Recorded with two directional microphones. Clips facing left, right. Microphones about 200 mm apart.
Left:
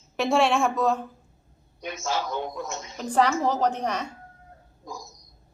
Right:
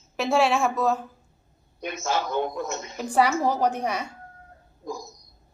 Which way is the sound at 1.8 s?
55° right (ahead or behind).